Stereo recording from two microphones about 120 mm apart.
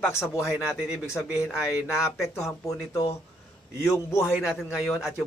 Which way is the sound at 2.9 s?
20° left (ahead or behind).